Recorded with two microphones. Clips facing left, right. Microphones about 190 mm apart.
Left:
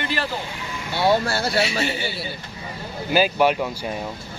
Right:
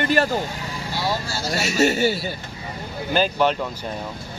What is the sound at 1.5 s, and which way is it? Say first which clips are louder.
Speech: right 8 dB; 45° right (ahead or behind).